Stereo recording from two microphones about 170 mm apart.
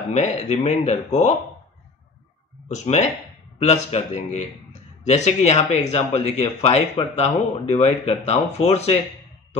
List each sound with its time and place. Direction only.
0.1 s speech: 40° left (ahead or behind)
2.7 s speech: 40° left (ahead or behind)